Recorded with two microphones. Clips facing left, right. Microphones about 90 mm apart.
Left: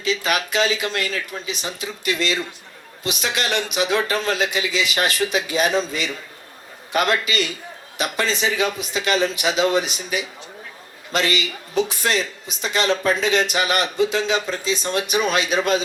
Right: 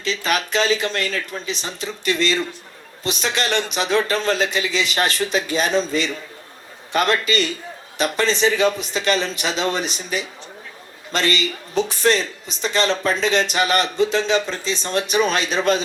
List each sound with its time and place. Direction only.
0.1 s a man's voice: 35° right (ahead or behind)